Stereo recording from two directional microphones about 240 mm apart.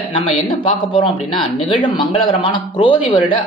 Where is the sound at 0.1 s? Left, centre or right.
Left.